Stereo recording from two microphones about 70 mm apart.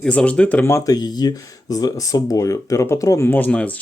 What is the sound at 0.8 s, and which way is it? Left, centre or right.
Speech, left.